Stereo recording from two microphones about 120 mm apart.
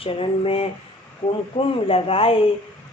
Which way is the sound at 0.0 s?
50° left (ahead or behind).